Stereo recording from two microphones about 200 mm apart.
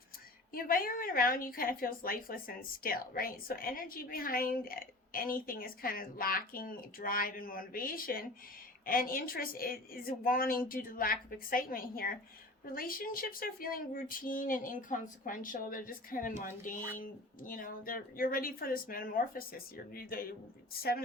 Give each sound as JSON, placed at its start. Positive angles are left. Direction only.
{"t": 0.5, "sound": "a woman's voice", "side_deg": 45}